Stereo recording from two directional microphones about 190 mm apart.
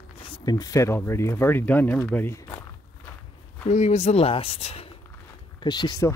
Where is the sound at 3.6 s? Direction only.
35° left (ahead or behind); by 6.1 s 20° left (ahead or behind).